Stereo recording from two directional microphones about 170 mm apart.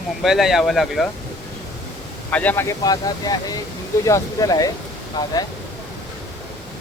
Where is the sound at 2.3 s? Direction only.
10° left (ahead or behind).